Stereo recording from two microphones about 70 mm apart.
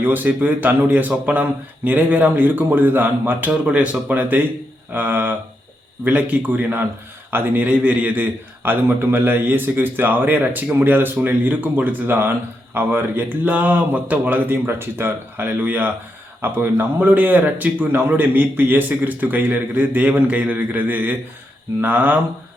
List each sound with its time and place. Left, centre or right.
0.0 s speech: right
3.7 s speech: centre